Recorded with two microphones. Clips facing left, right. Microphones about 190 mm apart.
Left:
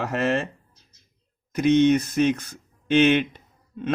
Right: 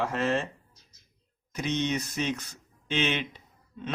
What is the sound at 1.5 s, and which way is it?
Speech, 55° left (ahead or behind).